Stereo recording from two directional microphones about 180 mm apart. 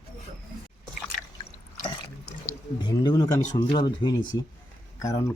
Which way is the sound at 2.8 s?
20° left (ahead or behind).